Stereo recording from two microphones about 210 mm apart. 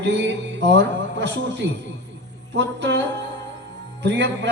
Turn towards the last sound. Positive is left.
turn(degrees=-55)  # may be behind; listen again after turning